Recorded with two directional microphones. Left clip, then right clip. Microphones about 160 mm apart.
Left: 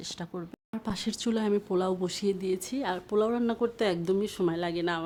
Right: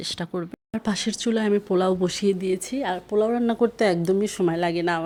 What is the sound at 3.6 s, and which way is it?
Speech, 20° right (ahead or behind).